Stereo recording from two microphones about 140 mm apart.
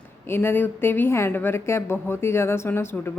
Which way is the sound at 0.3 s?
15° left (ahead or behind).